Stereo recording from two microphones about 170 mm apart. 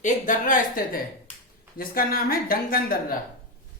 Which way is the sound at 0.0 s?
50° left (ahead or behind).